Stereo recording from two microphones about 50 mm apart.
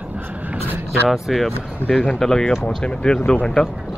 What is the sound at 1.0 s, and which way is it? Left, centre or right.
Speech, centre.